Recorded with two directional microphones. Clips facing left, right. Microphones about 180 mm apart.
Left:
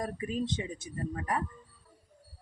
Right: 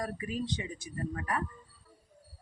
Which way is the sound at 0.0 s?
25° left (ahead or behind).